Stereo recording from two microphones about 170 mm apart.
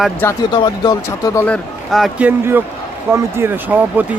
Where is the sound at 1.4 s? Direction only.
5° left (ahead or behind).